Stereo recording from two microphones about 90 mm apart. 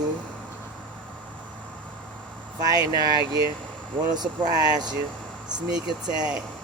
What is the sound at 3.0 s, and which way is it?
Speech, 45° right (ahead or behind).